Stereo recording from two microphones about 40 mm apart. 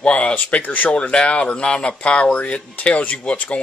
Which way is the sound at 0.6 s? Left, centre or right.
Left.